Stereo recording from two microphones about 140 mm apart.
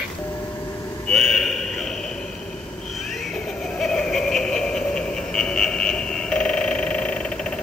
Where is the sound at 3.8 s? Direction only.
5° left (ahead or behind).